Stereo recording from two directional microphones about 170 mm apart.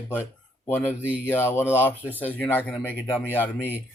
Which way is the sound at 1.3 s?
15° left (ahead or behind).